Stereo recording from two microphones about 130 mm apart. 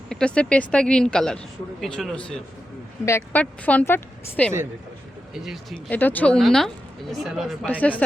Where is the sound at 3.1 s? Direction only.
20° left (ahead or behind).